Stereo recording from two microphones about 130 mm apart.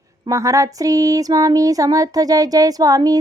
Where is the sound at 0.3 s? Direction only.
25° right (ahead or behind).